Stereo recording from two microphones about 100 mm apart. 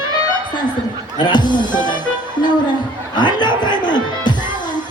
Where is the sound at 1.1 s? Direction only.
50° left (ahead or behind).